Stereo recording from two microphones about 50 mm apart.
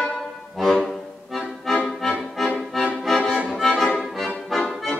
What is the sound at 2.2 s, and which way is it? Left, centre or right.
Accordion, centre.